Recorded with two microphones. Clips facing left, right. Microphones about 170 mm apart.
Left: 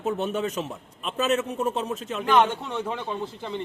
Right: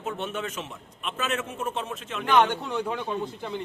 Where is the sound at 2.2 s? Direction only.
Centre (ahead or behind).